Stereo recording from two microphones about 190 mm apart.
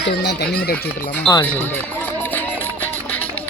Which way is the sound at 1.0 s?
10° left (ahead or behind).